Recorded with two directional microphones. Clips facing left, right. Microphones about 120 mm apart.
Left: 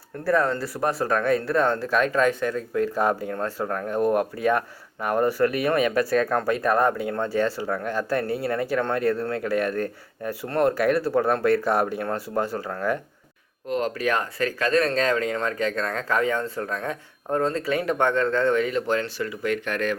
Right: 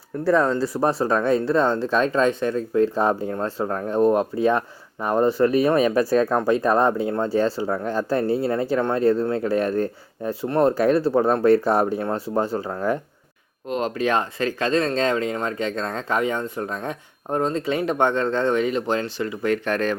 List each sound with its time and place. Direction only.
0.3 s speech: 25° right (ahead or behind)